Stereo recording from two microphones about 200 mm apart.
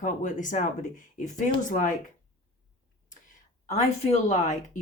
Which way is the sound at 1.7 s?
40° left (ahead or behind).